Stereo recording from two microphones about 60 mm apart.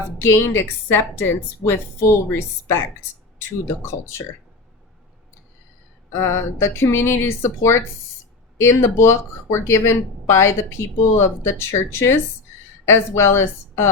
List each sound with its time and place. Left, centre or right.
0.2 s speech: left
6.1 s a woman's voice: left